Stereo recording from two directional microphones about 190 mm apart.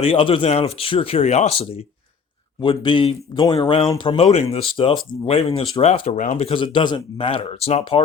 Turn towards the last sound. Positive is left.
turn(degrees=30)  # may be behind; listen again after turning